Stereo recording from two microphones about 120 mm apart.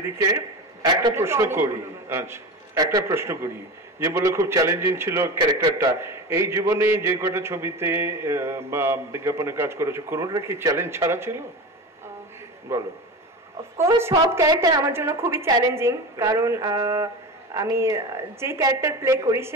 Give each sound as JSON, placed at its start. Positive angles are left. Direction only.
{"t": 1.1, "sound": "a man's voice", "side_deg": -20}
{"t": 5.6, "sound": "a man's voice", "side_deg": -35}
{"t": 5.9, "sound": "a man's voice", "side_deg": -20}
{"t": 12.7, "sound": "a man's voice", "side_deg": -20}
{"t": 14.5, "sound": "a man's voice", "side_deg": -35}
{"t": 14.9, "sound": "a man's voice", "side_deg": -20}